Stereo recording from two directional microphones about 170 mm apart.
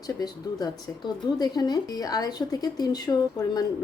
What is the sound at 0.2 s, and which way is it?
A woman's voice, 25° left (ahead or behind).